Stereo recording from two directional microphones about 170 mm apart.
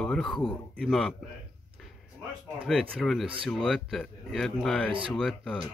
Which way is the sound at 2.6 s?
Centre (ahead or behind).